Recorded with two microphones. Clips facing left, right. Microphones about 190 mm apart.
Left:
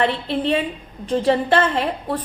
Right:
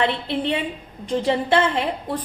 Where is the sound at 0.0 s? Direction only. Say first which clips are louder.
Left 2 dB; 20° right (ahead or behind).